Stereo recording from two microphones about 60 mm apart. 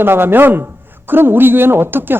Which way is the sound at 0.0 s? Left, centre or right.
Right.